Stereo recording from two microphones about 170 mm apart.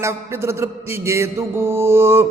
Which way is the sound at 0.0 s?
15° right (ahead or behind).